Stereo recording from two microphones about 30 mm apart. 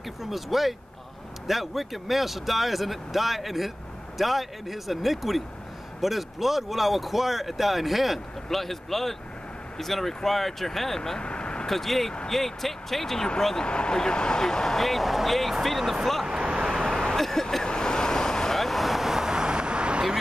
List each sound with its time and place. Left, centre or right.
0.2 s speech: centre
11.1 s vehicle: left
11.6 s speech: centre
13.6 s speech: left
14.8 s speech: centre
16.3 s vehicle: right
17.2 s vehicle: centre
17.6 s vehicle: left
18.5 s vehicle: centre
19.1 s vehicle: right